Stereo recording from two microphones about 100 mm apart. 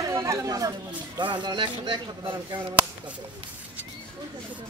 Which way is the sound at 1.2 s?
50° right (ahead or behind).